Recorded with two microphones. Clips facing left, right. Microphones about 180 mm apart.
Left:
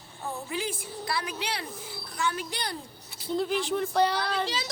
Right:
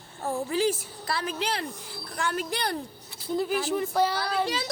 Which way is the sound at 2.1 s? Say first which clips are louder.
Right 2 dB; 55° right (ahead or behind).